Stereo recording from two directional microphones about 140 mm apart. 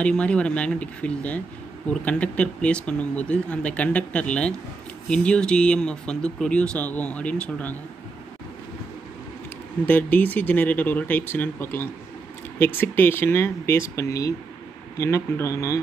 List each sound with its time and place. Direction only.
0.0 s speech: 10° left (ahead or behind)
9.8 s speech: 10° left (ahead or behind)